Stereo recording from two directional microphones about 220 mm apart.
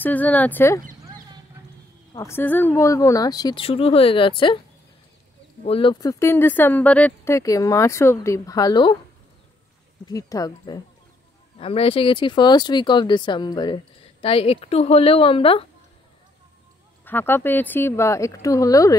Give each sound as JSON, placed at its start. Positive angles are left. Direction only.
{"t": 0.0, "sound": "speech", "side_deg": 5}
{"t": 2.1, "sound": "speech", "side_deg": 10}
{"t": 5.6, "sound": "speech", "side_deg": 25}
{"t": 10.0, "sound": "speech", "side_deg": 15}
{"t": 11.5, "sound": "speech", "side_deg": 25}
{"t": 17.0, "sound": "speech", "side_deg": 10}